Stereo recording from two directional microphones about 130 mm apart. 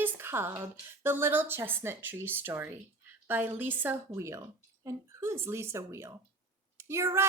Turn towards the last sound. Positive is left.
turn(degrees=-20)  # may be behind; listen again after turning